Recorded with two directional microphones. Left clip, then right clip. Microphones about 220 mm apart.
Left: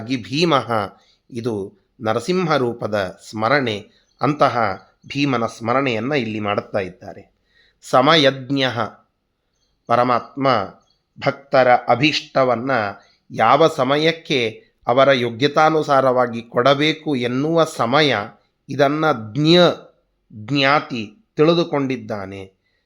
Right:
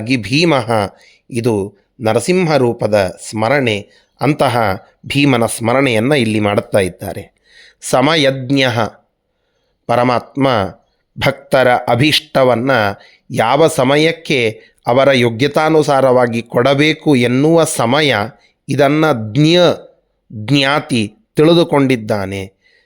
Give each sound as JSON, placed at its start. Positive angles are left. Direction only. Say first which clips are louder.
{"t": 0.0, "sound": "speech", "louder": "right 6 dB", "side_deg": -35}